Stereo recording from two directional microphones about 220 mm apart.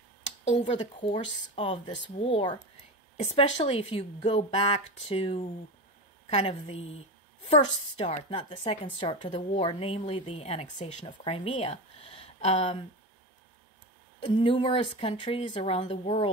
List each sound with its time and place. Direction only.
0.5 s speech: 35° left (ahead or behind)
8.0 s speech: 25° left (ahead or behind)
14.2 s speech: 25° left (ahead or behind)